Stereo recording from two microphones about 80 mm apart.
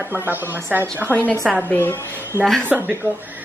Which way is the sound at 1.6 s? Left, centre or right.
Left.